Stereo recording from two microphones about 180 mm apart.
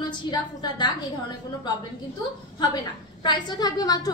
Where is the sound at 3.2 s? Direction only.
25° left (ahead or behind).